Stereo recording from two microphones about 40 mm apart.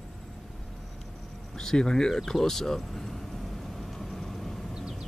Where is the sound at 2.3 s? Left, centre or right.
Centre.